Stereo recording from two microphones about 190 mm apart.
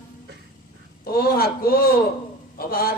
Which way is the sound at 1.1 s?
50° left (ahead or behind).